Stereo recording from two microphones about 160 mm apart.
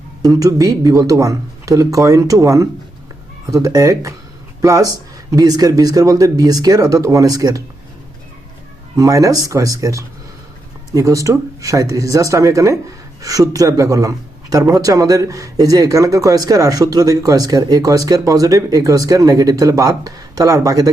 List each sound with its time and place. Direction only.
0.2 s speech: 20° right (ahead or behind)
9.0 s speech: 20° right (ahead or behind)